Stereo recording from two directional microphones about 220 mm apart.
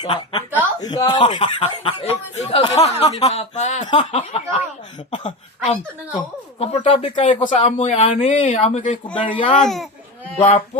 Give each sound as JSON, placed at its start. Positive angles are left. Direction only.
{"t": 0.0, "sound": "speech", "side_deg": 20}
{"t": 9.3, "sound": "speech", "side_deg": 20}